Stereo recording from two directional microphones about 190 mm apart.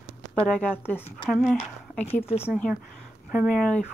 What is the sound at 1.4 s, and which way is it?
Speech, 5° left (ahead or behind).